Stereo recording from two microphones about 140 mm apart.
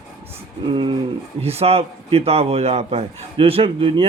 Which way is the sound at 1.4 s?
45° right (ahead or behind).